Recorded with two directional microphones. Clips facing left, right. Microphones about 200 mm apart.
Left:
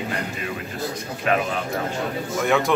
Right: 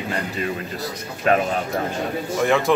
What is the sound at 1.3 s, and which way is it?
Speech, 35° right (ahead or behind).